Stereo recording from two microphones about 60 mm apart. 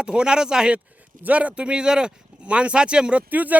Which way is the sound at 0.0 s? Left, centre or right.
Centre.